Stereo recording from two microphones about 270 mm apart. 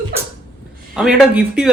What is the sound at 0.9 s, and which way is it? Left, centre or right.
Speech, centre.